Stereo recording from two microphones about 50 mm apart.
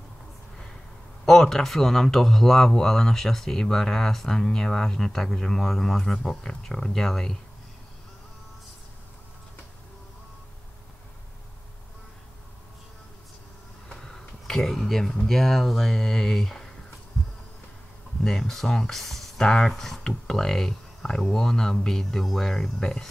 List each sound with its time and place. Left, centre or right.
1.2 s a man's voice: centre
13.8 s speech: centre
18.5 s speech: centre
19.4 s a man's voice: centre
19.7 s a man's voice: centre